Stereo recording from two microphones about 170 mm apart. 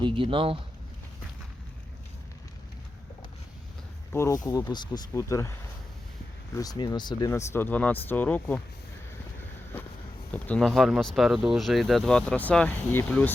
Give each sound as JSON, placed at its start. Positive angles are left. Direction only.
{"t": 0.0, "sound": "speech", "side_deg": -30}
{"t": 4.1, "sound": "speech", "side_deg": 15}
{"t": 6.6, "sound": "speech", "side_deg": 20}
{"t": 10.3, "sound": "speech", "side_deg": 10}